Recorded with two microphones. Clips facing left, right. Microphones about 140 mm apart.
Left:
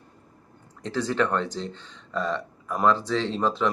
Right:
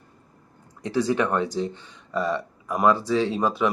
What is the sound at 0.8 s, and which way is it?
Speech, 10° right (ahead or behind).